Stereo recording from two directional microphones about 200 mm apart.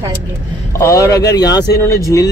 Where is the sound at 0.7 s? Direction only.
15° left (ahead or behind).